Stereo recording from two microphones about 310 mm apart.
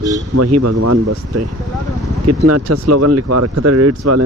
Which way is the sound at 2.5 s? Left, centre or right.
Right.